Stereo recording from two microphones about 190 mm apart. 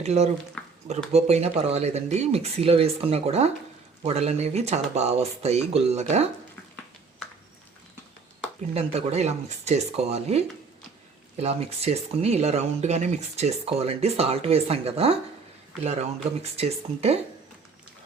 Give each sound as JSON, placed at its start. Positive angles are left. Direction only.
{"t": 0.0, "sound": "speech", "side_deg": -35}
{"t": 8.7, "sound": "speech", "side_deg": -35}